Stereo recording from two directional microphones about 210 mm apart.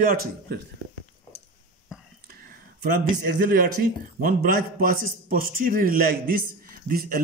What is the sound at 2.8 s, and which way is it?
A man's voice, 45° right (ahead or behind).